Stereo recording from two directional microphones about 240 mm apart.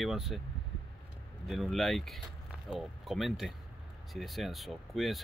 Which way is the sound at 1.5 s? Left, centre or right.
Centre.